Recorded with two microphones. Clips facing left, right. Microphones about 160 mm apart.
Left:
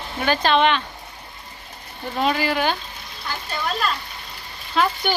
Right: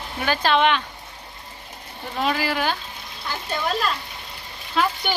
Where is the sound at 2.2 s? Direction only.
Centre (ahead or behind).